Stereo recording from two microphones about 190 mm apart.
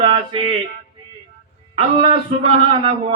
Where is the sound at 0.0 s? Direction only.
25° right (ahead or behind).